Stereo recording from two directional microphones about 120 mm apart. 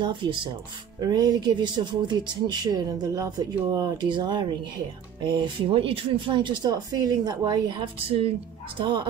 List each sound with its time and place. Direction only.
0.0 s speech: 40° right (ahead or behind)